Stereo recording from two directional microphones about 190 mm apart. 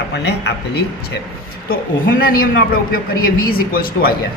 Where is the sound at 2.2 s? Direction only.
50° left (ahead or behind).